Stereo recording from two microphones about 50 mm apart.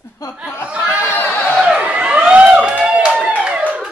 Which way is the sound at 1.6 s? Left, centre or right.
Right.